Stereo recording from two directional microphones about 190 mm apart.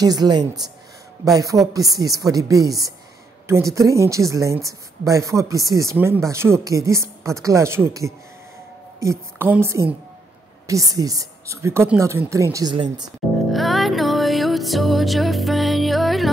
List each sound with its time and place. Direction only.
0.0 s a woman's voice: 20° right (ahead or behind)
13.5 s music: centre (ahead or behind)